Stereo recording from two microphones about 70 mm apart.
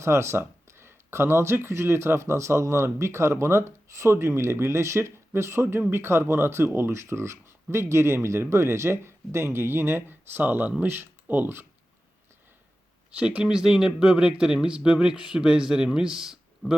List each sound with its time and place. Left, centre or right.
0.0 s speech: right
13.1 s speech: centre